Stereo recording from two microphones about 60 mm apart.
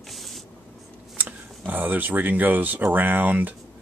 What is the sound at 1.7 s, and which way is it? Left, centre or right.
Speech, right.